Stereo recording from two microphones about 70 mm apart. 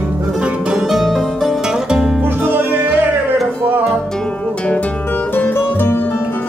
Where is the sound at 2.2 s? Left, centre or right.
Right.